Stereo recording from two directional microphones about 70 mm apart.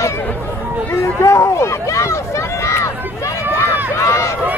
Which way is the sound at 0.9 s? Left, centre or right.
Left.